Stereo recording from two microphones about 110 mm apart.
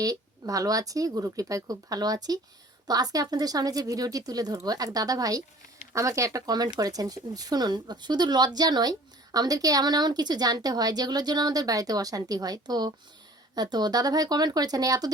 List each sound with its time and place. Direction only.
0.0 s speech: 35° right (ahead or behind)